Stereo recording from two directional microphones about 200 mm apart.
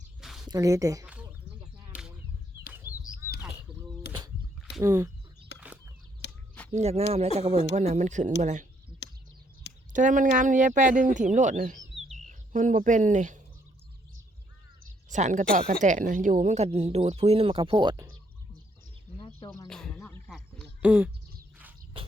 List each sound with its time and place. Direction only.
0.2 s a sound: centre (ahead or behind)
0.4 s speech: 15° right (ahead or behind)
2.8 s bird: 10° right (ahead or behind)
4.8 s speech: 15° right (ahead or behind)
5.5 s a sound: 5° right (ahead or behind)
6.2 s a sound: 60° left (ahead or behind)
6.7 s a woman's voice: 30° right (ahead or behind)
9.9 s a woman's voice: 40° right (ahead or behind)
15.1 s a woman's voice: 40° right (ahead or behind); by 18.0 s 25° right (ahead or behind)
19.6 s music: 5° left (ahead or behind)
20.0 s a sound: 5° left (ahead or behind)
20.8 s speech: 5° right (ahead or behind)